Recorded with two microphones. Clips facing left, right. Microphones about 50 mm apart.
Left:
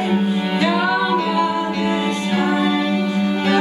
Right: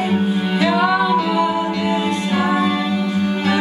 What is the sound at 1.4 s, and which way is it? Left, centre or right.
Music, centre.